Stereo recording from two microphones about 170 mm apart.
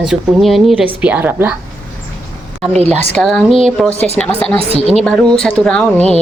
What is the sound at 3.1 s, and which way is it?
Speech, 5° left (ahead or behind).